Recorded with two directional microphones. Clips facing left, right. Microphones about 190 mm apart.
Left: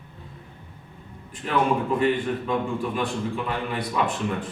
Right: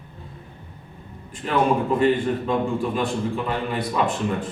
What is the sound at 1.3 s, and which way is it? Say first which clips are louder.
A man's voice: right 2 dB; 40° right (ahead or behind).